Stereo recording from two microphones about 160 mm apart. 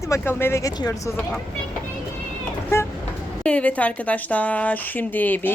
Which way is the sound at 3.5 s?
10° left (ahead or behind).